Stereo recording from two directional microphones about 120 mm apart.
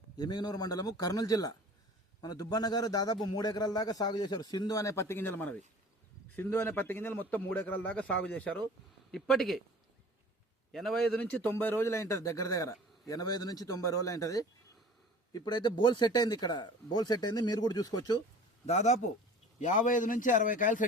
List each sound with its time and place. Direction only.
0.2 s a man's voice: 35° left (ahead or behind); by 9.6 s centre (ahead or behind)
10.7 s a man's voice: centre (ahead or behind); by 18.2 s 35° left (ahead or behind)
18.6 s speech: 70° left (ahead or behind)
19.5 s a man's voice: 90° left